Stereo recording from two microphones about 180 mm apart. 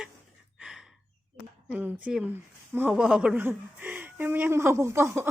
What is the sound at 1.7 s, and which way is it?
Speech, 10° right (ahead or behind).